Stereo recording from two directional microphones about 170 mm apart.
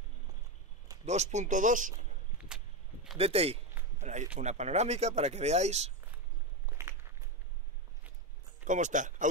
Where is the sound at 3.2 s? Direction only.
35° right (ahead or behind).